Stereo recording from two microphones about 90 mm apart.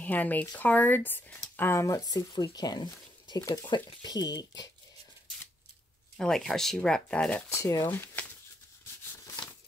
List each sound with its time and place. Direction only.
0.0 s speech: 20° left (ahead or behind)
1.9 s speech: 45° left (ahead or behind)
6.1 s speech: 5° left (ahead or behind)
7.3 s speech: 30° left (ahead or behind)
7.9 s a sound: 20° left (ahead or behind)